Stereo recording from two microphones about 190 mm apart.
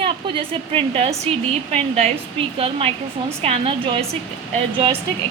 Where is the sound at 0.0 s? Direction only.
30° right (ahead or behind).